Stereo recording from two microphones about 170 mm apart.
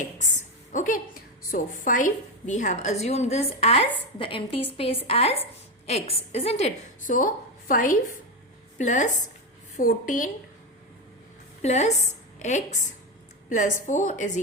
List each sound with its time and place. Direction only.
0.0 s a sound: 45° left (ahead or behind)
1.5 s a woman's voice: 50° left (ahead or behind)
11.6 s a woman's voice: 40° left (ahead or behind)